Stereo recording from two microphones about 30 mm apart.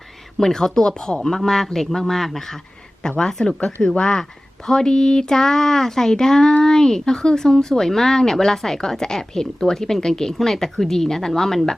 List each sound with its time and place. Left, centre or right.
0.3 s speech: centre
1.6 s speech: centre
3.0 s speech: left